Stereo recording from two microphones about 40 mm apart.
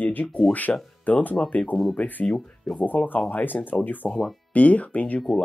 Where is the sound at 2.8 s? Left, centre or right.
Left.